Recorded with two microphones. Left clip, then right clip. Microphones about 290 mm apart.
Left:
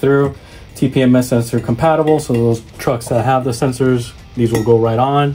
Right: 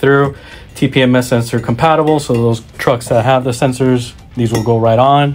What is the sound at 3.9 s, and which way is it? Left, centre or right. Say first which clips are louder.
Speech: right 2 dB; right.